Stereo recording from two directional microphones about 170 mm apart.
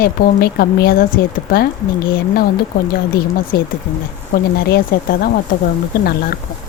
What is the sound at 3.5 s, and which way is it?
Speech, 65° left (ahead or behind).